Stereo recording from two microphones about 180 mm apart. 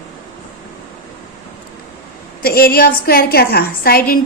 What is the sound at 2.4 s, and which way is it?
A woman's voice, 60° left (ahead or behind).